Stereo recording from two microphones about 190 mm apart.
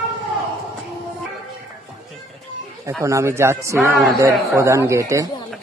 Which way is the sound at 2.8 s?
15° right (ahead or behind).